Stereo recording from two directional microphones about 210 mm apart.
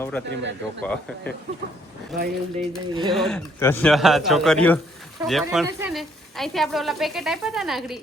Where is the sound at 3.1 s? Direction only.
Centre (ahead or behind).